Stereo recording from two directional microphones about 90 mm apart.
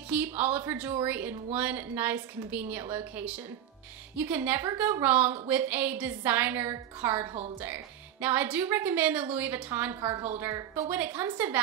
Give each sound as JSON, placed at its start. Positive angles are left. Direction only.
{"t": 0.1, "sound": "a woman's voice", "side_deg": -15}